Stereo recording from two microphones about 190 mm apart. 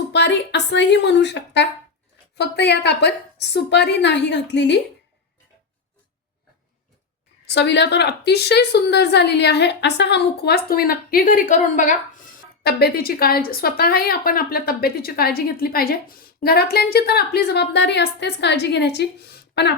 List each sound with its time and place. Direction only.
0.1 s a woman's voice: 65° left (ahead or behind)
7.4 s a woman's voice: 60° left (ahead or behind); by 11.9 s 40° left (ahead or behind)
12.6 s a woman's voice: 55° left (ahead or behind)